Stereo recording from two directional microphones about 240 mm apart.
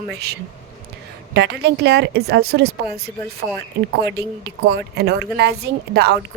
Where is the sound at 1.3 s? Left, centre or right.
Right.